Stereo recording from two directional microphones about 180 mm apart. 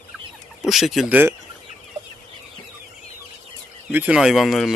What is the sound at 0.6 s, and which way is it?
Speech, centre (ahead or behind).